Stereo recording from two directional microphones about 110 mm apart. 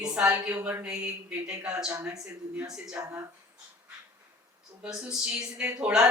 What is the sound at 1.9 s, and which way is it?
Speech, 30° right (ahead or behind).